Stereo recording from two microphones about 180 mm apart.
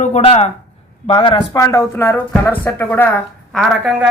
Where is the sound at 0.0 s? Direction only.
35° left (ahead or behind).